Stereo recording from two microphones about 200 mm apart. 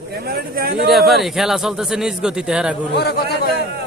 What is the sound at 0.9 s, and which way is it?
A man's voice, centre (ahead or behind).